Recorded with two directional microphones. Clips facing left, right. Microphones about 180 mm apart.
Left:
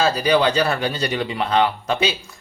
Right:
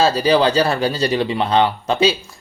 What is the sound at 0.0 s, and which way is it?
Speech, 30° right (ahead or behind).